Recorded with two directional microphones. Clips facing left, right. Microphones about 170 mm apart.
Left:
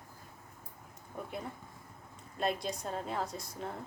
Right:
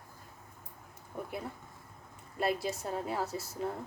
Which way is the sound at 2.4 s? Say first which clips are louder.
Right 2 dB; 5° right (ahead or behind).